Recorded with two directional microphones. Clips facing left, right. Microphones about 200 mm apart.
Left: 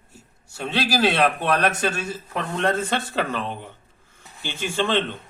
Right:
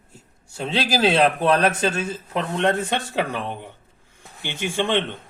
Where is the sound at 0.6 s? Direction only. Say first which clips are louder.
Right 1 dB; 30° right (ahead or behind).